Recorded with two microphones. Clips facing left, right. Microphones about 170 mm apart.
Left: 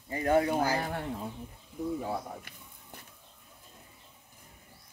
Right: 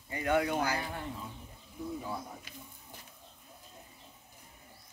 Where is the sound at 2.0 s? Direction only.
60° left (ahead or behind).